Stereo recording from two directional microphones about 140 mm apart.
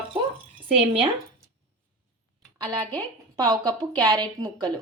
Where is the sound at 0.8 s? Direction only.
40° right (ahead or behind).